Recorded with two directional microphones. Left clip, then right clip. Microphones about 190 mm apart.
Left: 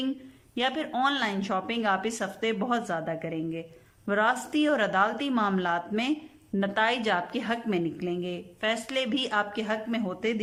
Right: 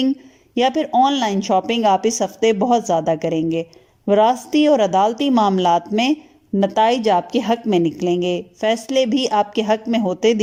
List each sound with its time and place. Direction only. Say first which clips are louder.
0.5 s a woman's voice: right 12 dB; 30° right (ahead or behind)
4.0 s a woman's voice: right 11 dB; 30° right (ahead or behind)